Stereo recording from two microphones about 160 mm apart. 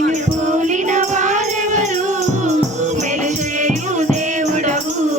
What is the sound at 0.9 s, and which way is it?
Music, 50° right (ahead or behind).